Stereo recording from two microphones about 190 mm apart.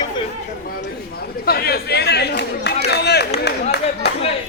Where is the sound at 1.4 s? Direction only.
55° left (ahead or behind).